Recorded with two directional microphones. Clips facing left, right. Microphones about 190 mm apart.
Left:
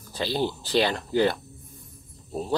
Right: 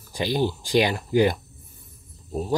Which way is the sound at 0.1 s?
15° right (ahead or behind).